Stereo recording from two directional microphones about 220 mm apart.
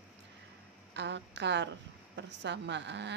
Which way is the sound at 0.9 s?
50° right (ahead or behind).